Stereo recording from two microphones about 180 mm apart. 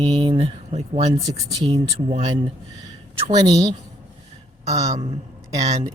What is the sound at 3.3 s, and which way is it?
Speech, 20° right (ahead or behind).